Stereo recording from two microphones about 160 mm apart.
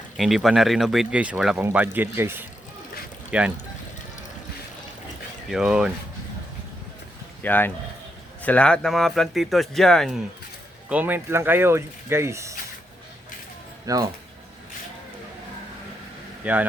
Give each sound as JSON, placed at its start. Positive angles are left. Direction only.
{"t": 0.2, "sound": "speech", "side_deg": 0}
{"t": 5.5, "sound": "speech", "side_deg": -5}
{"t": 7.4, "sound": "speech", "side_deg": 10}
{"t": 10.8, "sound": "speech", "side_deg": -10}
{"t": 13.8, "sound": "speech", "side_deg": -20}
{"t": 16.4, "sound": "speech", "side_deg": -10}